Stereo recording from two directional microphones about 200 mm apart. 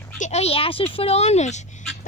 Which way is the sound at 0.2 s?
35° left (ahead or behind).